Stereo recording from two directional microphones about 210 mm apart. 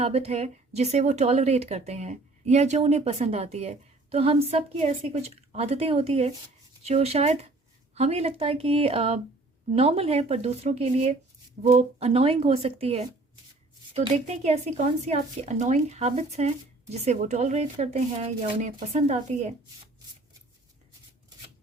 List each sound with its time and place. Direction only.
0.0 s a woman's voice: 30° right (ahead or behind)